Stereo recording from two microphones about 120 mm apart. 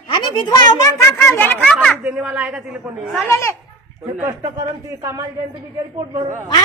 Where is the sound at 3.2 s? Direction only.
20° left (ahead or behind).